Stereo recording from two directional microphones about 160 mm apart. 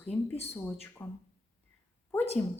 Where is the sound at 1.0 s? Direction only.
15° left (ahead or behind).